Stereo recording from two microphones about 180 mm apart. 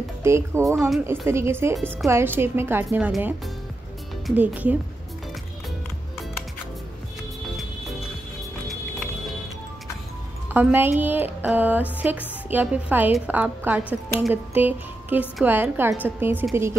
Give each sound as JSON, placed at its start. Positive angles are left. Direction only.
{"t": 0.2, "sound": "speech", "side_deg": -15}
{"t": 1.8, "sound": "a woman's voice", "side_deg": 5}
{"t": 2.0, "sound": "speech", "side_deg": -15}
{"t": 4.4, "sound": "speech", "side_deg": -10}
{"t": 10.5, "sound": "a woman's voice", "side_deg": -10}